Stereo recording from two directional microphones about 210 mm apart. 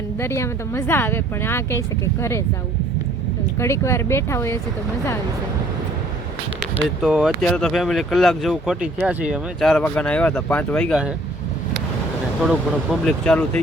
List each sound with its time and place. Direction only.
0.2 s speech: 10° left (ahead or behind)
3.6 s speech: 15° left (ahead or behind)
7.0 s speech: centre (ahead or behind)
12.4 s speech: centre (ahead or behind)